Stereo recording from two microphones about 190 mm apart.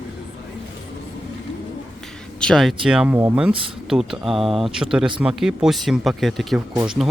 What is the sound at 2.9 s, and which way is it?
Speech, 5° right (ahead or behind).